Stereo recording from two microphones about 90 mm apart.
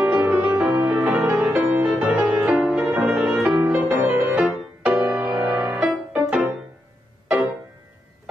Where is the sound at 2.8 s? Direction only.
25° right (ahead or behind).